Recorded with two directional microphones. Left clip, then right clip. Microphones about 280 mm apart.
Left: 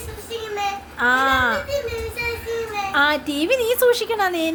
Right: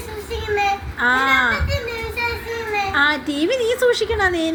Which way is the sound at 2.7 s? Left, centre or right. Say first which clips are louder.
Right 2 dB; centre.